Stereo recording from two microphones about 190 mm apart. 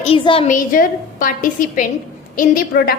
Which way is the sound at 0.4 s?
45° left (ahead or behind).